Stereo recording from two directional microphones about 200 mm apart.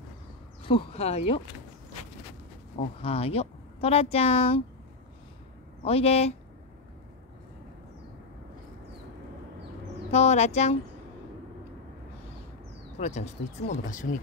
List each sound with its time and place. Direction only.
0.7 s speech: 30° left (ahead or behind)
2.8 s speech: 30° left (ahead or behind)
5.9 s speech: 30° left (ahead or behind)
10.1 s speech: 30° left (ahead or behind)
13.0 s speech: 35° left (ahead or behind)